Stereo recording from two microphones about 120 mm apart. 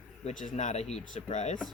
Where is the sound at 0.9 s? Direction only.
70° left (ahead or behind).